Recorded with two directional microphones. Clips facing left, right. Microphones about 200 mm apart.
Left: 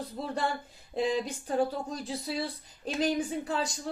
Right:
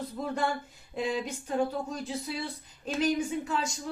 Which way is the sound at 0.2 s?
35° left (ahead or behind).